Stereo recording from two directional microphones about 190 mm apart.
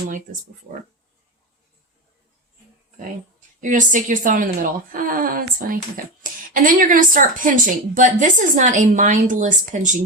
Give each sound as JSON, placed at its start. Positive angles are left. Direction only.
{"t": 3.6, "sound": "a woman's voice", "side_deg": -40}